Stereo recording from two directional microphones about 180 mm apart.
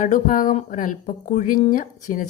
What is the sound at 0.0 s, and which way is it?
Speech, 45° left (ahead or behind).